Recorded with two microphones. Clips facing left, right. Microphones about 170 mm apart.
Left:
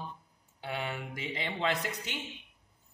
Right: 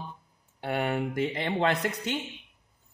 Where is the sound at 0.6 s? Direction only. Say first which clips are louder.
Right 8 dB; 55° right (ahead or behind).